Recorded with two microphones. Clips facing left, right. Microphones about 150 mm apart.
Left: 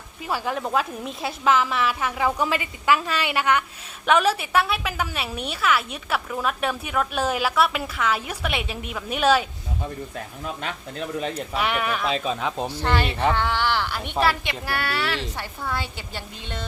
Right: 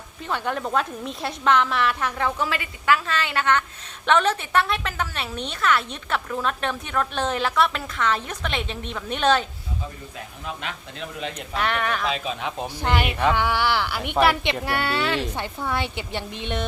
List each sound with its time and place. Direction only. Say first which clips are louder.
0.2 s a woman's voice: even; 5° left (ahead or behind)
2.4 s a woman's voice: left 2 dB; 15° left (ahead or behind)
11.5 s a woman's voice: right 1 dB; 5° left (ahead or behind)
12.0 s speech: left 2 dB; 40° left (ahead or behind)
12.7 s speech: right 3 dB; 15° right (ahead or behind)